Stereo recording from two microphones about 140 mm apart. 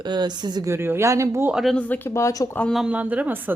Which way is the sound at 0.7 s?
15° right (ahead or behind).